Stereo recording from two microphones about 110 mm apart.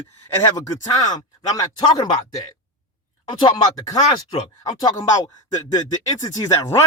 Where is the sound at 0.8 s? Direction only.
35° left (ahead or behind).